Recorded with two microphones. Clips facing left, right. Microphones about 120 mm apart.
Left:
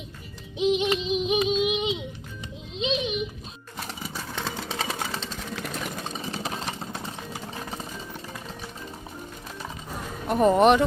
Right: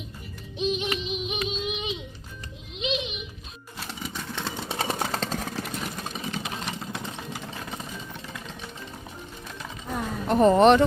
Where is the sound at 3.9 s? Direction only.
5° left (ahead or behind).